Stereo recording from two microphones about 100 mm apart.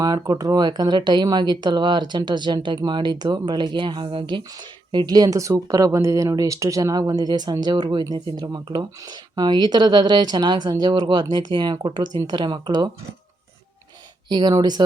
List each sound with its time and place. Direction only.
0.0 s speech: 40° right (ahead or behind)
14.3 s speech: 45° right (ahead or behind)